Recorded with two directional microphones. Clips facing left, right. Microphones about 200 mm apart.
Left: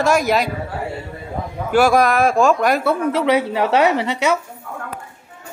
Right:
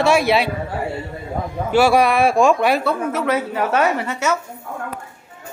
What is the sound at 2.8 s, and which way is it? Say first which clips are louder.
A woman's voice: left 3 dB; 15° left (ahead or behind).